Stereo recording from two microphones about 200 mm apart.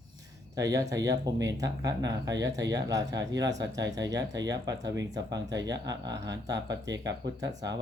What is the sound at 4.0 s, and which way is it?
Speech, 20° right (ahead or behind).